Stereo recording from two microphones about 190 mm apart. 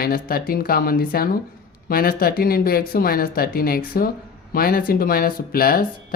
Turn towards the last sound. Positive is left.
turn(degrees=50)  # may be behind; listen again after turning